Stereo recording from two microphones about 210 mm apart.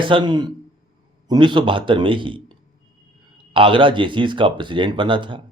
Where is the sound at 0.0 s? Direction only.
20° right (ahead or behind).